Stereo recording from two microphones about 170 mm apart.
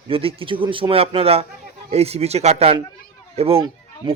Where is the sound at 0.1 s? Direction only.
35° right (ahead or behind).